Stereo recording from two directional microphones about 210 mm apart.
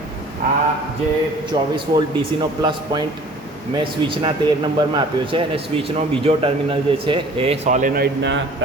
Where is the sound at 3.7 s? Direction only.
20° right (ahead or behind); by 8.4 s 50° right (ahead or behind).